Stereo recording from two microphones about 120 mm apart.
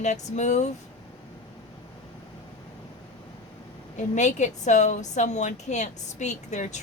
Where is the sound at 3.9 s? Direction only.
85° left.